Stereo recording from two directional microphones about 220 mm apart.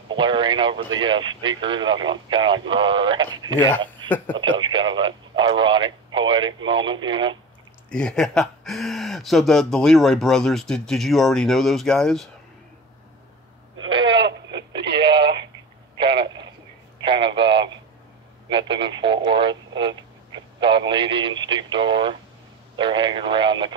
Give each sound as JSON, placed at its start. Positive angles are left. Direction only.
{"t": 0.1, "sound": "speech", "side_deg": -20}
{"t": 7.9, "sound": "speech", "side_deg": 5}
{"t": 13.7, "sound": "a sound", "side_deg": -20}
{"t": 14.8, "sound": "radio", "side_deg": -50}
{"t": 15.0, "sound": "telephone", "side_deg": -20}
{"t": 17.0, "sound": "a sound", "side_deg": -20}
{"t": 18.5, "sound": "radio", "side_deg": -20}
{"t": 22.8, "sound": "speech", "side_deg": -20}